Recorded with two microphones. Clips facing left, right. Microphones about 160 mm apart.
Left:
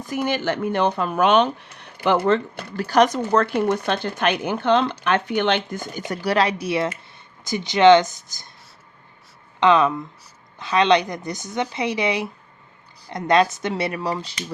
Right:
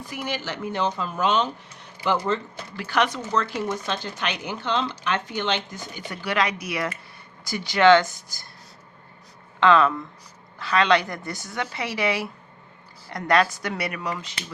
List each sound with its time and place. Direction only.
0.1 s speech: 50° left (ahead or behind)
2.7 s speech: 40° left (ahead or behind)
3.2 s speech: 60° left (ahead or behind)
6.1 s speech: 35° left (ahead or behind); by 8.4 s 20° left (ahead or behind)
9.6 s speech: 20° left (ahead or behind)